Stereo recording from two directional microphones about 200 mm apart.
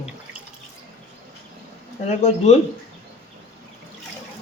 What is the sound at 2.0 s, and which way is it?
Speech, 35° left (ahead or behind).